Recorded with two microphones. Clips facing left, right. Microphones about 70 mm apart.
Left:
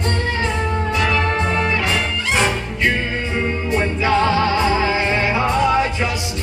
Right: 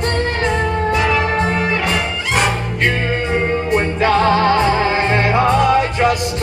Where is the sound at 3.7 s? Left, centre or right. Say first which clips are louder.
Right 2 dB; right.